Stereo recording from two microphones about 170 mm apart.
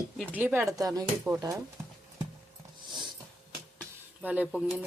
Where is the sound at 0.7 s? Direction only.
20° right (ahead or behind).